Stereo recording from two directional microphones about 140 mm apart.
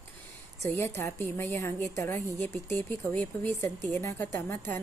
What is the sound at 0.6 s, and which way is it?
A woman's voice, 20° left (ahead or behind).